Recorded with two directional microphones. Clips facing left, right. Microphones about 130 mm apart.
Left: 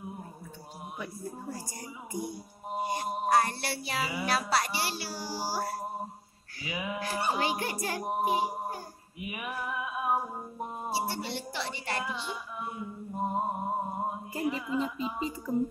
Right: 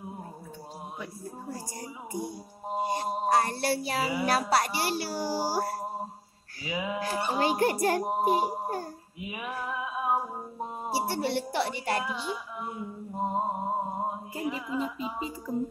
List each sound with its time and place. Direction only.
1.7 s music: 30° right (ahead or behind)
4.3 s a woman's voice: 45° right (ahead or behind)
6.6 s a sound: 25° right (ahead or behind)
7.0 s music: 40° right (ahead or behind)
8.0 s a sound: 30° right (ahead or behind)
8.3 s child singing: 50° right (ahead or behind)
9.2 s music: 30° right (ahead or behind)
11.2 s a woman's voice: 60° right (ahead or behind)
12.0 s speech: 10° right (ahead or behind)
13.2 s mantra: 25° right (ahead or behind)
14.3 s music: 5° right (ahead or behind)